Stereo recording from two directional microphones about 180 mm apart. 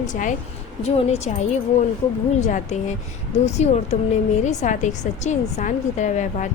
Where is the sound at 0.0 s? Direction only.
45° left (ahead or behind).